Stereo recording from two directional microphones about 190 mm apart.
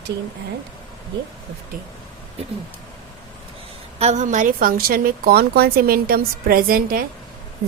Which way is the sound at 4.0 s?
40° right (ahead or behind).